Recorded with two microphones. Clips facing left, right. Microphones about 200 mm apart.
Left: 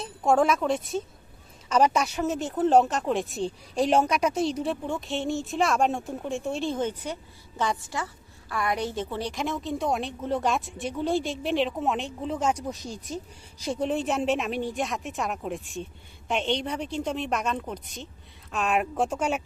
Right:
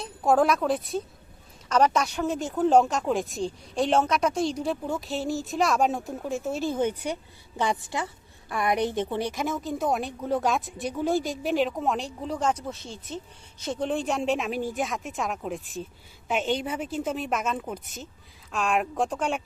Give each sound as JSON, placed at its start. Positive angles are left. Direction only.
{"t": 0.0, "sound": "a woman's voice", "side_deg": 0}
{"t": 9.3, "sound": "a woman's voice", "side_deg": 0}